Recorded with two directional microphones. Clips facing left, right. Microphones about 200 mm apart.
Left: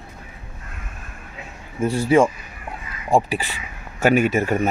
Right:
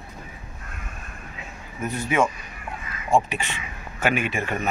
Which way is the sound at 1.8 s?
30° left (ahead or behind).